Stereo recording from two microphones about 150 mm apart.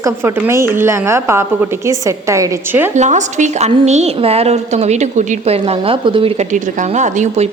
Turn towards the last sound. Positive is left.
turn(degrees=-50)  # may be behind; listen again after turning